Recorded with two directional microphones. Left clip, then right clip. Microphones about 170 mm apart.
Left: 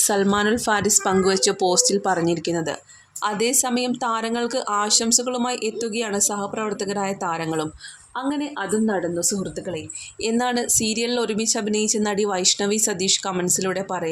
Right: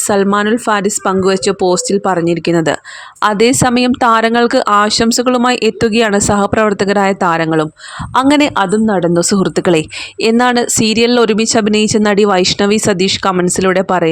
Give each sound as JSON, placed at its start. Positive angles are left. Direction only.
{"t": 0.1, "sound": "speech", "side_deg": -35}
{"t": 8.1, "sound": "a woman's voice", "side_deg": -80}
{"t": 10.2, "sound": "speech", "side_deg": -50}